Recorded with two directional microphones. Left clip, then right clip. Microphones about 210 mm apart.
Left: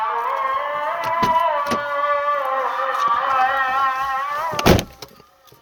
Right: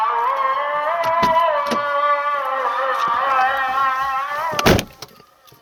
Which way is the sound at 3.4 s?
45° left (ahead or behind).